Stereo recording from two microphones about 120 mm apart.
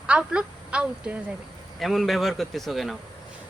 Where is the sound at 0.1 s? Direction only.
10° right (ahead or behind).